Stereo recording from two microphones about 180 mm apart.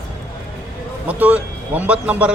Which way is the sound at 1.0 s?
10° right (ahead or behind).